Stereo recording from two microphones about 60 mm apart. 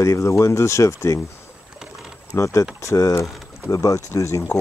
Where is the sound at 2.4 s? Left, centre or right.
Left.